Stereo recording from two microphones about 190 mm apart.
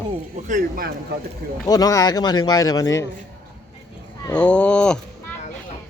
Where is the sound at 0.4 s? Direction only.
45° right (ahead or behind).